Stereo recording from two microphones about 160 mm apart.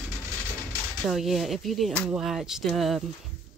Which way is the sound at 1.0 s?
Centre (ahead or behind).